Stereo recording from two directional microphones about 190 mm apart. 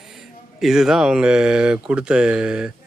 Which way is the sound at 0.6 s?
Centre (ahead or behind).